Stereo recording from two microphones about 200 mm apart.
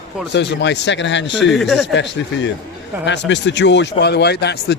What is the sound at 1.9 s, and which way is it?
Speech, 65° left (ahead or behind).